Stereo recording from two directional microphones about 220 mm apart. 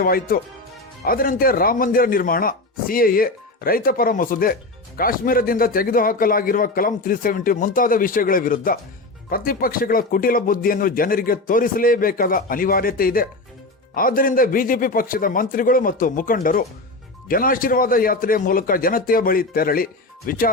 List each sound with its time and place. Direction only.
0.0 s speech: 40° left (ahead or behind)